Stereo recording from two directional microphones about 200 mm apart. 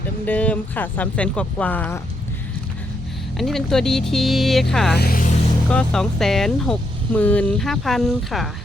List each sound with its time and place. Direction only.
0.3 s speech: 5° left (ahead or behind)
3.3 s speech: centre (ahead or behind)
4.9 s speech: 45° left (ahead or behind)
5.6 s speech: 5° left (ahead or behind)